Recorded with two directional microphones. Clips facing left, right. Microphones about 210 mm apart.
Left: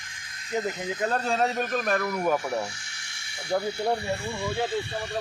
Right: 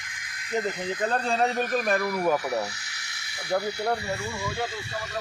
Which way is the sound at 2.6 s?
30° left (ahead or behind).